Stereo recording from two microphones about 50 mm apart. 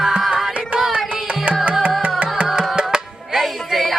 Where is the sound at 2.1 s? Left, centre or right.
Right.